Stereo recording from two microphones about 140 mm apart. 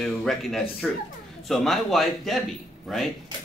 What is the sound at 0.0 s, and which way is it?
Speech, centre (ahead or behind).